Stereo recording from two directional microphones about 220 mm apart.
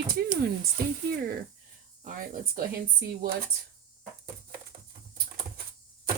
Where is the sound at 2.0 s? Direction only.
40° right (ahead or behind).